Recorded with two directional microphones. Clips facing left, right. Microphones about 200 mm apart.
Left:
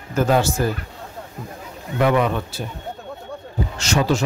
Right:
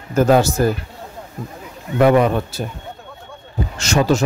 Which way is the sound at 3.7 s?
45° right (ahead or behind).